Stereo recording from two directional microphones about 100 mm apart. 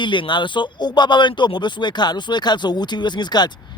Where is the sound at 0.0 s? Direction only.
55° left (ahead or behind).